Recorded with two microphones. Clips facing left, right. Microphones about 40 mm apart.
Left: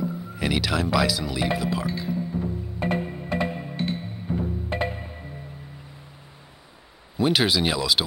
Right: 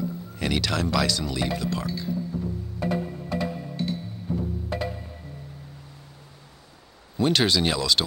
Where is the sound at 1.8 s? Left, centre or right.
Left.